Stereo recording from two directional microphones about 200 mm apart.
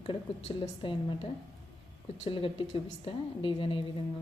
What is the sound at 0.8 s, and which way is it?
A woman's voice, 25° left (ahead or behind).